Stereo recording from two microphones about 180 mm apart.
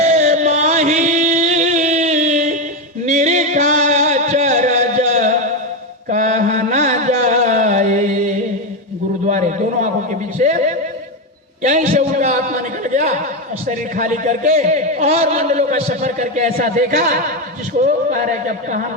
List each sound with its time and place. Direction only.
0.0 s chant: 40° right (ahead or behind)
3.1 s music: 40° right (ahead or behind)
6.1 s mantra: 45° right (ahead or behind)
9.2 s a sound: 45° right (ahead or behind)
13.7 s a man's voice: 45° right (ahead or behind)